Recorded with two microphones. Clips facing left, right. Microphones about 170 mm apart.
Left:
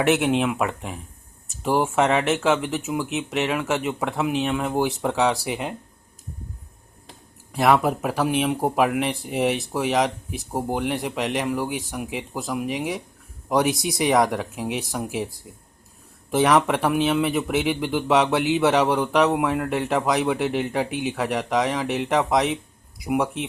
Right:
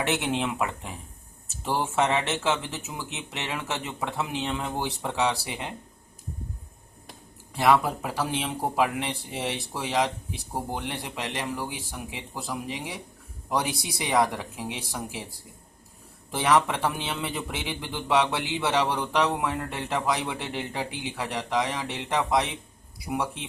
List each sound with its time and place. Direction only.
0.1 s speech: 20° left (ahead or behind)
7.5 s speech: 20° left (ahead or behind)
16.3 s speech: 20° left (ahead or behind)